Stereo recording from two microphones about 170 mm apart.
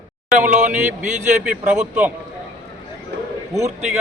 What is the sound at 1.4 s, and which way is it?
Speech, 5° right (ahead or behind).